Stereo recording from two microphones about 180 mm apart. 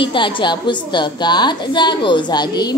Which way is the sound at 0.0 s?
25° left (ahead or behind).